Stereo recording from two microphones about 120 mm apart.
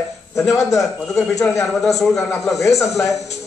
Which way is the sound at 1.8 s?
Centre (ahead or behind).